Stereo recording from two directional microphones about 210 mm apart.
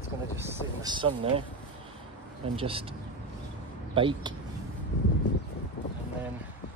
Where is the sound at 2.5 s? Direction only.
25° right (ahead or behind).